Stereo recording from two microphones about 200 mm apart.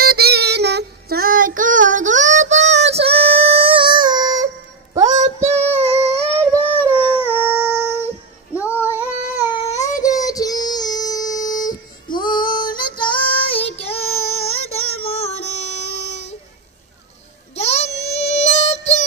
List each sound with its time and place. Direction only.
0.0 s child singing: 50° right (ahead or behind); by 4.5 s 20° right (ahead or behind)
5.0 s child singing: 35° right (ahead or behind)
6.9 s a sound: 10° right (ahead or behind)
7.5 s child singing: 15° left (ahead or behind)
8.6 s female singing: 10° left (ahead or behind)
9.5 s child singing: 35° left (ahead or behind)
10.0 s child singing: 15° left (ahead or behind)
14.0 s child singing: 90° left
14.7 s music: 30° left (ahead or behind)
17.6 s a sound: 35° left (ahead or behind)